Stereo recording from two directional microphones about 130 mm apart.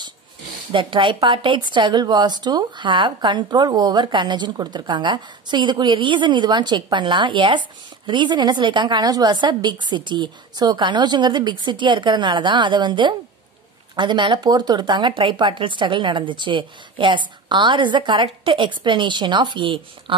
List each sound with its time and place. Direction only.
0.7 s a woman's voice: 40° right (ahead or behind)